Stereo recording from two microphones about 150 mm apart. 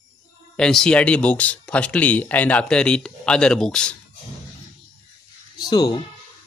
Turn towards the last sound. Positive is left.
turn(degrees=25)  # may be behind; listen again after turning